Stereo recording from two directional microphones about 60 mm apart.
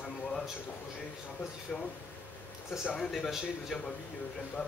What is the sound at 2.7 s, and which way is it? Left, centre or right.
Speech, centre.